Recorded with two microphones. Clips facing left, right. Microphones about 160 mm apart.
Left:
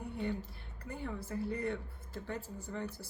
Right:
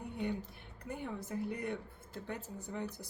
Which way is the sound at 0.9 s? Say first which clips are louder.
Even; 20° right (ahead or behind).